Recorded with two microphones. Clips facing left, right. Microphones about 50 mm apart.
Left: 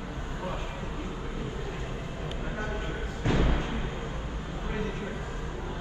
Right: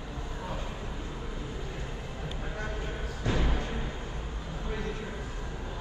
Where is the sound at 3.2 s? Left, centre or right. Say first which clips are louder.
Left 3 dB; left.